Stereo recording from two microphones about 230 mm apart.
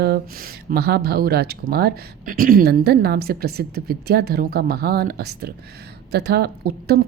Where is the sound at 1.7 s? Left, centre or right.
Right.